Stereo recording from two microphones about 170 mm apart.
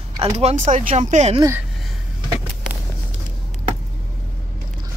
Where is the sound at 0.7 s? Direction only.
45° right (ahead or behind).